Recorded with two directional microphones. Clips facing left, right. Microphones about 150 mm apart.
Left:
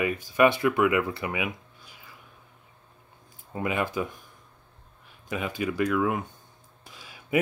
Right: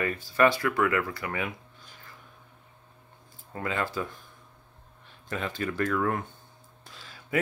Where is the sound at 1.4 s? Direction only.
10° left (ahead or behind).